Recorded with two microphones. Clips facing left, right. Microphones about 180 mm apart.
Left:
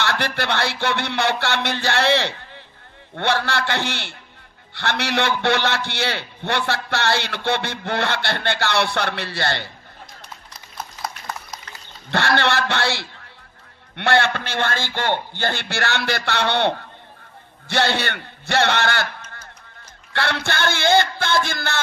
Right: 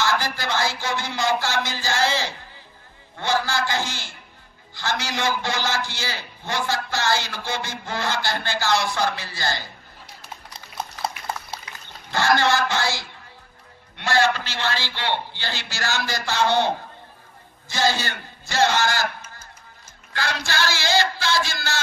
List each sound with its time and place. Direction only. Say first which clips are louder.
0.0 s a man's voice: left 1 dB; 65° left (ahead or behind)
12.1 s a man's voice: even; 65° left (ahead or behind)
20.1 s a man's voice: left 4 dB; 65° left (ahead or behind)